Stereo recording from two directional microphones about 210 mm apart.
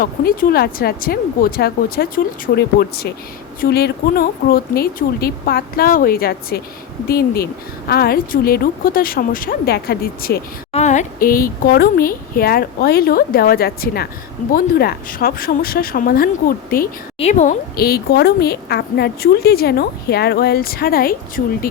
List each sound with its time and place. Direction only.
0.0 s a woman's voice: 45° left (ahead or behind)
10.7 s a woman's voice: 35° left (ahead or behind)
17.2 s a woman's voice: 35° left (ahead or behind)